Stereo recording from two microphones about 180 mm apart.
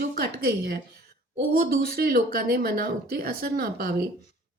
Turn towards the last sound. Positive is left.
turn(degrees=-55)  # may be behind; listen again after turning